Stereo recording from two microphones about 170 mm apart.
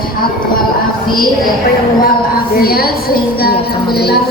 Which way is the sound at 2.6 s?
65° left (ahead or behind).